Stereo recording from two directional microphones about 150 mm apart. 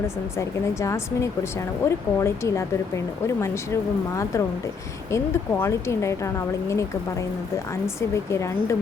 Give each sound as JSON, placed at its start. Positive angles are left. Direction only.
{"t": 0.3, "sound": "speech", "side_deg": 20}